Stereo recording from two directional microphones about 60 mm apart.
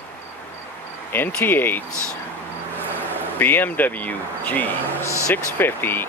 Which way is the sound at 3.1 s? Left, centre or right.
Left.